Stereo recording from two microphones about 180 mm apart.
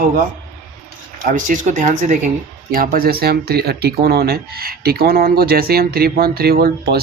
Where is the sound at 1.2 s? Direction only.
45° right (ahead or behind).